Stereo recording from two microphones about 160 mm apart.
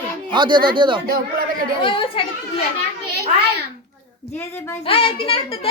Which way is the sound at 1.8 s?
35° left (ahead or behind).